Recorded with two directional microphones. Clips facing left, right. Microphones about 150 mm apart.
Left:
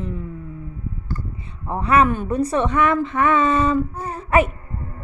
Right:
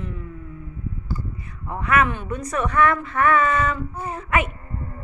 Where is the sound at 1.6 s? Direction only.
30° left (ahead or behind).